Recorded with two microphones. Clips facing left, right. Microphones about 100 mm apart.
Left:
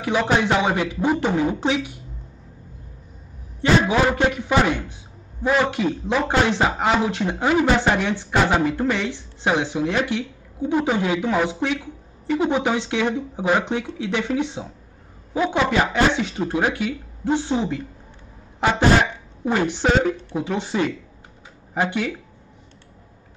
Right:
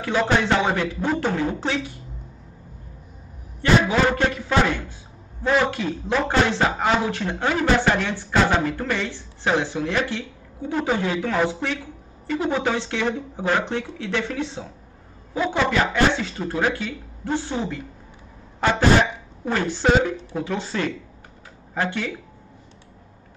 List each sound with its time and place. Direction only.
0.0 s speech: 15° left (ahead or behind)
3.8 s speech: 15° left (ahead or behind)